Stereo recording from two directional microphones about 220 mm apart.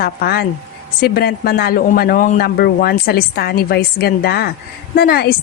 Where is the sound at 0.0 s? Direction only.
45° left (ahead or behind).